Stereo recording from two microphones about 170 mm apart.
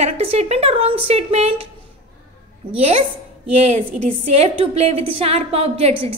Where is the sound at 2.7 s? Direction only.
35° right (ahead or behind).